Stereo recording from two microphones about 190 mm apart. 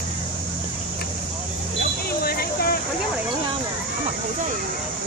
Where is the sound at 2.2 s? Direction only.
55° left (ahead or behind).